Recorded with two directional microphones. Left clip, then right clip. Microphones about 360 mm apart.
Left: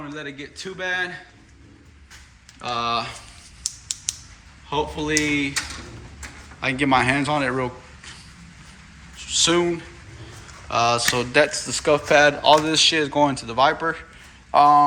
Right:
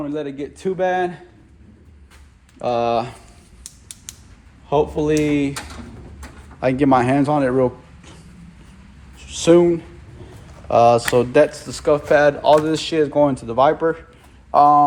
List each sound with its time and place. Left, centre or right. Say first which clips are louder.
0.1 s a man's voice: right 7 dB; centre
2.6 s a man's voice: right 5 dB; centre
3.6 s creak: left 11 dB; right
4.7 s a man's voice: right 6 dB; centre
6.6 s a man's voice: right 4 dB; centre
9.1 s a sound: right 6 dB; centre
10.7 s speech: right 6 dB; centre